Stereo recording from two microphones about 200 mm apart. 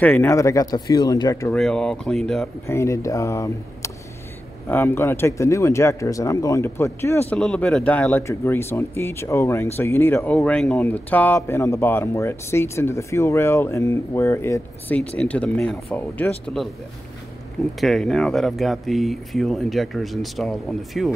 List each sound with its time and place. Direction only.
0.0 s speech: 10° left (ahead or behind)
1.6 s speech: 5° left (ahead or behind)
2.6 s speech: 15° left (ahead or behind)
17.7 s speech: centre (ahead or behind)